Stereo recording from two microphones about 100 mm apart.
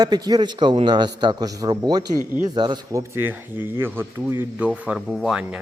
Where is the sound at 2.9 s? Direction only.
25° right (ahead or behind); by 5.6 s 5° right (ahead or behind).